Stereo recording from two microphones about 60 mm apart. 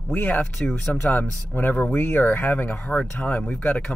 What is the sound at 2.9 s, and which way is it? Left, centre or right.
Speech, centre.